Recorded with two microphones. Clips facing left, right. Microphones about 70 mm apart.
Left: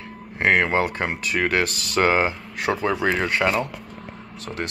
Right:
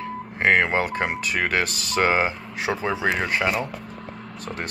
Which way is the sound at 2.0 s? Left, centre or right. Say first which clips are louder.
Left 2 dB; centre.